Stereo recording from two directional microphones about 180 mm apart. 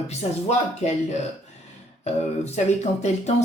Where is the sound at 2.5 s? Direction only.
40° left (ahead or behind).